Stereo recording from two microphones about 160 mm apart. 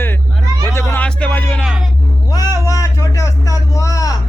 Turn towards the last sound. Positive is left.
turn(degrees=20)  # may be behind; listen again after turning